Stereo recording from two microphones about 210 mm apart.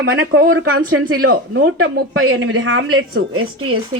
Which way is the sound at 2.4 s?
60° right (ahead or behind).